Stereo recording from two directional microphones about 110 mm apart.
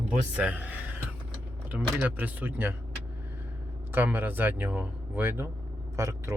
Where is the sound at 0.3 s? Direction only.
15° right (ahead or behind).